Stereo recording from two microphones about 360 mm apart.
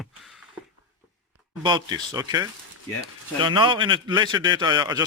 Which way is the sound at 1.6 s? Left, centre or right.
Centre.